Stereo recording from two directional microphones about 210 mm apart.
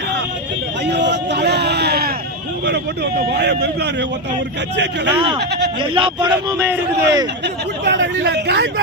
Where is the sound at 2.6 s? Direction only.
50° right (ahead or behind).